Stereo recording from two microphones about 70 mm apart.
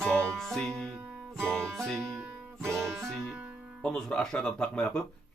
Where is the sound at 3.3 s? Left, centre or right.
Right.